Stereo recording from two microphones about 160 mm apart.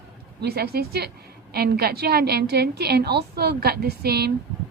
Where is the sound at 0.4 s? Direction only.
75° right (ahead or behind).